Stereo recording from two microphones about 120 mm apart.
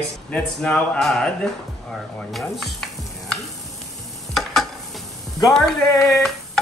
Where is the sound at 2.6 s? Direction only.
Centre (ahead or behind).